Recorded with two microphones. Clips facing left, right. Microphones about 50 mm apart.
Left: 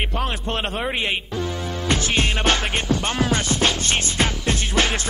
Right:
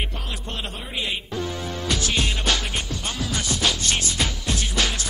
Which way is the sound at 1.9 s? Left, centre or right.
Left.